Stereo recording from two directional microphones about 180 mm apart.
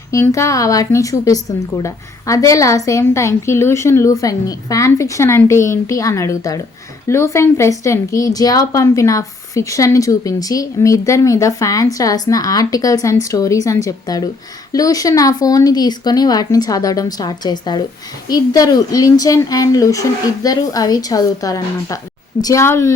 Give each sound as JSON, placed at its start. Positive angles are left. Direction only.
{"t": 0.1, "sound": "a woman's voice", "side_deg": 15}